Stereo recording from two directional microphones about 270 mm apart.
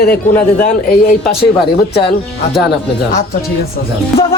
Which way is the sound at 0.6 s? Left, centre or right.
Left.